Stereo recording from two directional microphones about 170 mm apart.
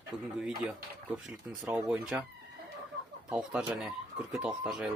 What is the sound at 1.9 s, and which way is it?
Speech, 5° right (ahead or behind).